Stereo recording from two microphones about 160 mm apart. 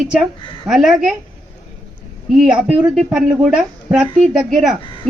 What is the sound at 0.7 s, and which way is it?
Speech, centre (ahead or behind).